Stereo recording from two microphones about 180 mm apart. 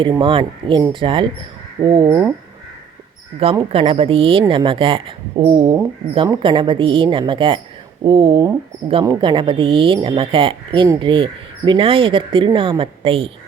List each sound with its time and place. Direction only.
0.2 s a woman's voice: 30° right (ahead or behind)
2.0 s speech: 15° right (ahead or behind)
3.4 s a woman's voice: 30° right (ahead or behind)